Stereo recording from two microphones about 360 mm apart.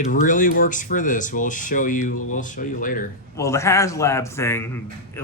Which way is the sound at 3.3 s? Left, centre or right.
Centre.